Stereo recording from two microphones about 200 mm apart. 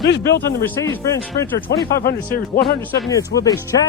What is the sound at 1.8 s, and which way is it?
Speech, 50° left (ahead or behind).